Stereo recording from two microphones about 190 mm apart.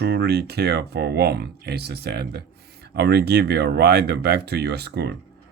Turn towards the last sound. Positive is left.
turn(degrees=-60)  # may be behind; listen again after turning